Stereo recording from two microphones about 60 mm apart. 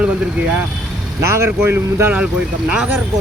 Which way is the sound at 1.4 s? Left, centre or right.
Right.